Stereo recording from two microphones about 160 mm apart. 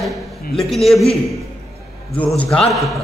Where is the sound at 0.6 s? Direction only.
Centre (ahead or behind).